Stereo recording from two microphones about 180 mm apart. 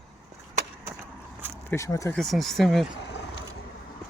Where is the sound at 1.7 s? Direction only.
15° left (ahead or behind).